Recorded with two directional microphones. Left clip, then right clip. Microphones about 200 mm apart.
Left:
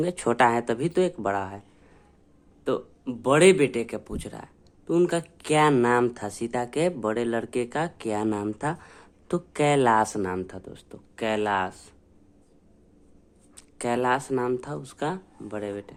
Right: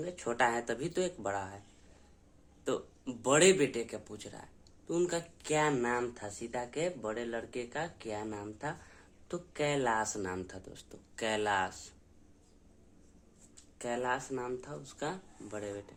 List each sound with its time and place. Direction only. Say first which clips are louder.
0.0 s speech: left 10 dB; 40° left (ahead or behind)
2.6 s speech: left 8 dB; 20° left (ahead or behind)
13.6 s speech: left 10 dB; 35° left (ahead or behind)